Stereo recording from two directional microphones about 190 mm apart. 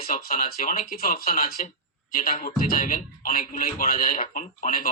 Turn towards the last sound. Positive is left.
turn(degrees=45)  # may be behind; listen again after turning